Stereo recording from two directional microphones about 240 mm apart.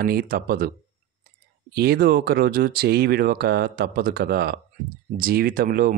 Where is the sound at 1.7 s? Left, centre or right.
Right.